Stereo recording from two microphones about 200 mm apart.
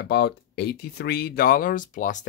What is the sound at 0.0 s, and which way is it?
Speech, 55° left (ahead or behind).